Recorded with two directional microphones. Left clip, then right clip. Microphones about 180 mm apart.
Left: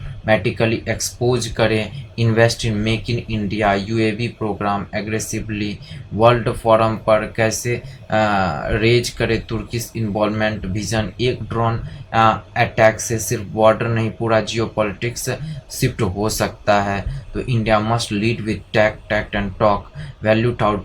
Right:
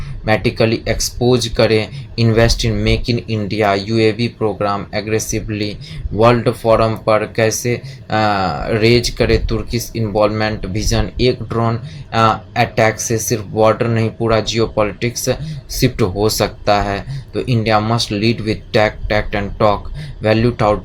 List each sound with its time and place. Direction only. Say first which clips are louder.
0.3 s speech: right 2 dB; 50° right (ahead or behind)